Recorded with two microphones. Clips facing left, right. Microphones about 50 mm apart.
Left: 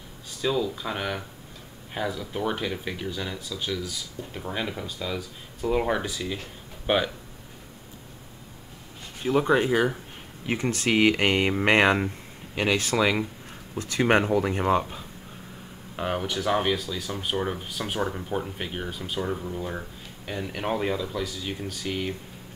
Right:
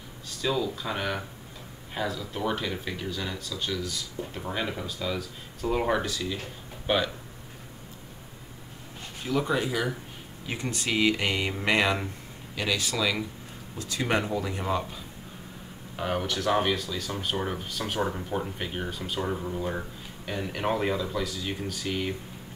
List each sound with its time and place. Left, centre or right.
0.4 s speech: centre
6.0 s speech: centre
9.2 s speech: left
16.0 s speech: centre